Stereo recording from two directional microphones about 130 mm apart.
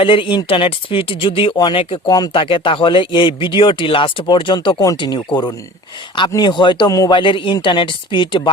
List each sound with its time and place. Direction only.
0.0 s speech: 40° left (ahead or behind)
2.0 s speech: 30° left (ahead or behind)
2.4 s speech: 40° left (ahead or behind)